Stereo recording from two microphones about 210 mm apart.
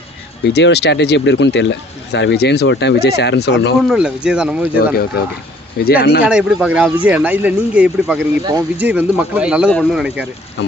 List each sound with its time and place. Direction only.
0.5 s speech: 50° left (ahead or behind)
3.8 s speech: 5° right (ahead or behind)
5.8 s speech: 45° left (ahead or behind)
6.2 s speech: 5° right (ahead or behind)
8.4 s speech: 20° right (ahead or behind)
8.9 s speech: 5° right (ahead or behind)